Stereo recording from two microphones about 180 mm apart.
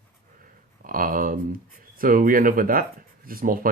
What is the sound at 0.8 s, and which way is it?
Speech, 50° right (ahead or behind).